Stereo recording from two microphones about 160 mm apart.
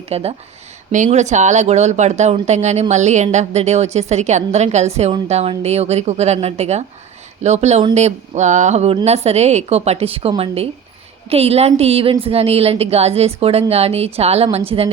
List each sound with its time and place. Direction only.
0.1 s a woman's voice: 40° right (ahead or behind)